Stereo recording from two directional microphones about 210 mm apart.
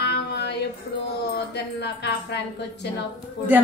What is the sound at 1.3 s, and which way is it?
Speech, 55° left (ahead or behind).